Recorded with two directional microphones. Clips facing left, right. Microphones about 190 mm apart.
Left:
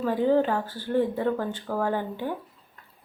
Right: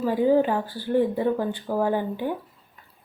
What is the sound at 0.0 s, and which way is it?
A woman's voice, 10° right (ahead or behind).